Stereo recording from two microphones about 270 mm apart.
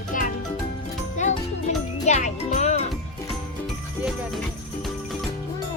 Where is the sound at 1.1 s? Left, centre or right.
Left.